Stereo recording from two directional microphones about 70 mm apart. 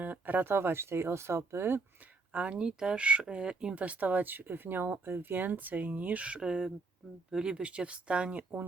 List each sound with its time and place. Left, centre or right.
0.0 s speech: right
2.3 s speech: centre